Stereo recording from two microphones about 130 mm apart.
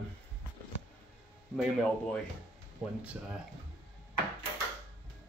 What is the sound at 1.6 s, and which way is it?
Speech, 5° left (ahead or behind).